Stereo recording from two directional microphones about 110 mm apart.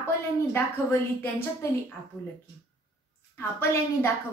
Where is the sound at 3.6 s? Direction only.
20° left (ahead or behind).